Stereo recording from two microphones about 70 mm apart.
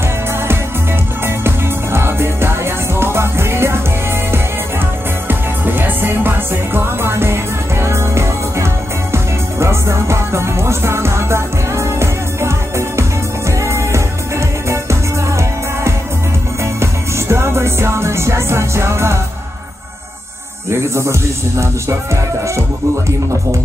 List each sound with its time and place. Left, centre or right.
1.2 s music: right
5.3 s music: right
20.7 s speech: right